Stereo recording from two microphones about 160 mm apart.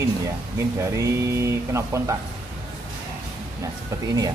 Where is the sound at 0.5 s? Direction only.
20° right (ahead or behind).